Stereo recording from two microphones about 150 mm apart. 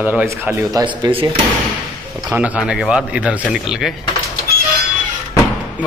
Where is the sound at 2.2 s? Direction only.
10° right (ahead or behind).